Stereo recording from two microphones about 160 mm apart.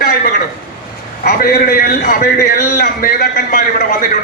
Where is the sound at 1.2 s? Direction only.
70° left (ahead or behind).